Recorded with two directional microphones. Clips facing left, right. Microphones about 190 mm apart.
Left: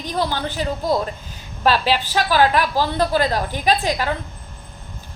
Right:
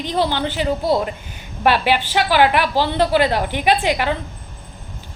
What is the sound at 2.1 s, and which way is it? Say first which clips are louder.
A woman's voice: right 1 dB; 20° right (ahead or behind).